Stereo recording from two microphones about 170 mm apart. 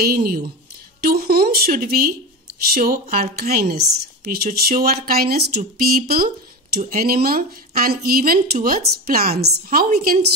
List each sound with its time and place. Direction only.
0.0 s speech: 60° right (ahead or behind)